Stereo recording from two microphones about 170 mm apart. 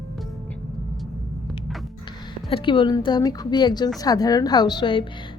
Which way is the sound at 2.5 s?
30° left (ahead or behind).